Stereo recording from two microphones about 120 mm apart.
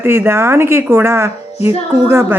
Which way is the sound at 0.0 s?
20° right (ahead or behind).